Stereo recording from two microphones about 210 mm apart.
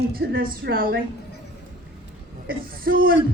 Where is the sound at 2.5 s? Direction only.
45° right (ahead or behind).